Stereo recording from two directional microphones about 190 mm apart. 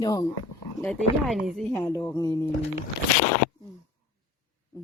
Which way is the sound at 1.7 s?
15° left (ahead or behind).